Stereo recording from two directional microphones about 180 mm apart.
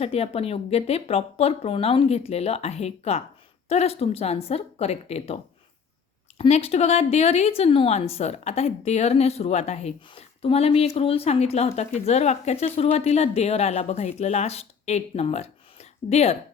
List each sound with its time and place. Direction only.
0.0 s a woman's voice: 35° left (ahead or behind)
6.4 s a woman's voice: 35° left (ahead or behind)